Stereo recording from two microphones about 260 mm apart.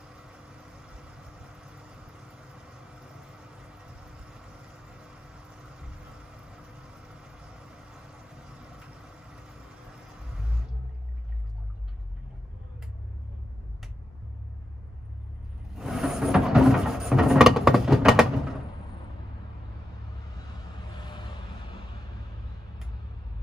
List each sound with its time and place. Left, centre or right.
0.0 s vehicle: centre
3.6 s vehicle: centre
15.7 s a sound: centre
20.9 s vehicle: centre